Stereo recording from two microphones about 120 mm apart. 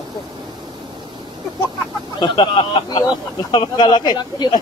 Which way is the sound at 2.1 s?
45° left (ahead or behind).